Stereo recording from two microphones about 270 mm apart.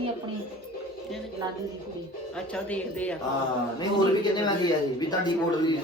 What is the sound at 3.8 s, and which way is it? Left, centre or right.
Speech, centre.